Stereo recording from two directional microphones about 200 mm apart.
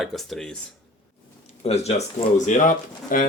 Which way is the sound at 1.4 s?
30° left (ahead or behind).